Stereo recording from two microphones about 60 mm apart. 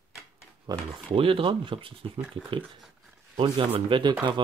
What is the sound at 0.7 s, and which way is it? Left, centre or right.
Speech, right.